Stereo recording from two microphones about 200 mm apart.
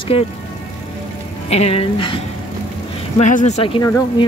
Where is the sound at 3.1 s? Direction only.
35° left (ahead or behind).